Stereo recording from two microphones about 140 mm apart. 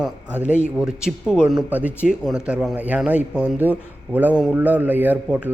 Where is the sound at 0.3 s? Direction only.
10° right (ahead or behind).